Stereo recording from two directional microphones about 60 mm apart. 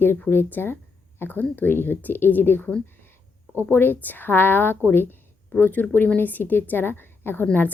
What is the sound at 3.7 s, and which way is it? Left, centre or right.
Speech, left.